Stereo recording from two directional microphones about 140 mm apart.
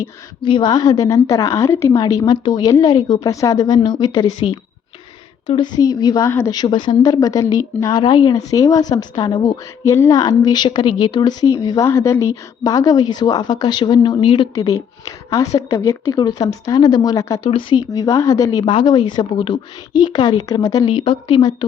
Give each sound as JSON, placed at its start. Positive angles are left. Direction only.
{"t": 0.4, "sound": "a woman's voice", "side_deg": 35}
{"t": 17.5, "sound": "a woman's voice", "side_deg": 40}
{"t": 17.9, "sound": "a woman's voice", "side_deg": 25}
{"t": 20.9, "sound": "a woman's voice", "side_deg": 35}